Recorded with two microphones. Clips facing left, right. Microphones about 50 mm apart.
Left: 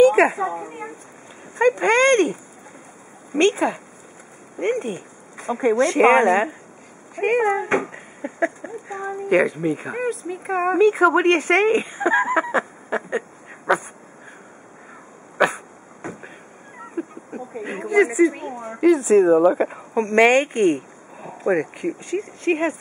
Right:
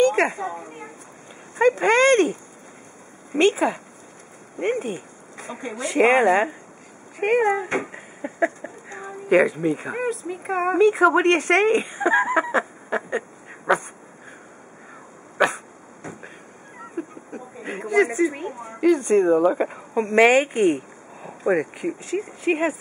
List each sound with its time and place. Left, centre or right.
0.0 s a sound: centre
0.5 s speech: left
1.5 s speech: centre
3.3 s speech: centre
13.7 s a sound: centre
16.2 s speech: centre